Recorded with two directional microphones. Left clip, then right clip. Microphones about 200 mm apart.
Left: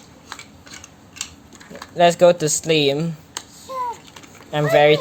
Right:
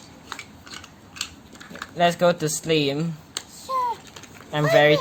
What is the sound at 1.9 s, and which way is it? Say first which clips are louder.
Speech: left 6 dB; 20° left (ahead or behind).